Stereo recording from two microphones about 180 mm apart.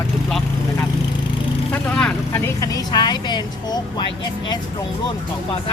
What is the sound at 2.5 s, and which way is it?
Speech, 20° left (ahead or behind).